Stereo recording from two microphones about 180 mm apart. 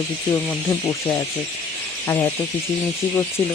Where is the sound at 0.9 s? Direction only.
10° left (ahead or behind).